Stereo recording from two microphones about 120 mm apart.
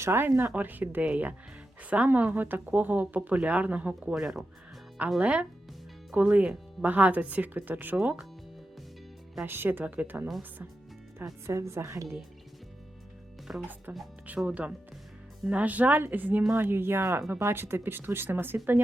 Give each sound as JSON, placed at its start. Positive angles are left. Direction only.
{"t": 0.0, "sound": "speech", "side_deg": -20}
{"t": 9.5, "sound": "speech", "side_deg": -15}
{"t": 11.4, "sound": "speech", "side_deg": -25}
{"t": 13.5, "sound": "speech", "side_deg": -10}